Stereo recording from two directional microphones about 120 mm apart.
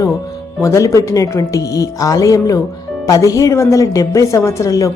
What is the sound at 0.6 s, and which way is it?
A woman's voice, 25° left (ahead or behind).